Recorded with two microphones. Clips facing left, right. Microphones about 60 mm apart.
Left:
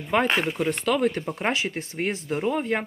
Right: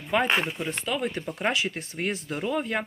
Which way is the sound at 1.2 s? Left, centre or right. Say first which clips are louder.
Left 1 dB; left.